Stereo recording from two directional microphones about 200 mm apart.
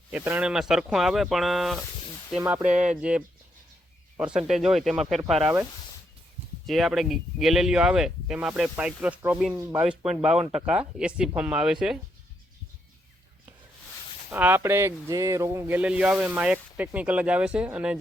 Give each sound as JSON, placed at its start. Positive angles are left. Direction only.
{"t": 0.1, "sound": "speech", "side_deg": -5}
{"t": 2.7, "sound": "speech", "side_deg": -40}
{"t": 3.0, "sound": "speech", "side_deg": -5}
{"t": 6.7, "sound": "speech", "side_deg": 0}
{"t": 14.3, "sound": "speech", "side_deg": -10}